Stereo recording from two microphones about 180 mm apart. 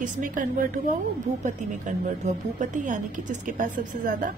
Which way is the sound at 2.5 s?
45° right (ahead or behind).